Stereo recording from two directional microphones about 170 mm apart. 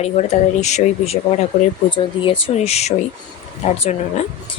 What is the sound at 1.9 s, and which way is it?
Speech, 30° left (ahead or behind).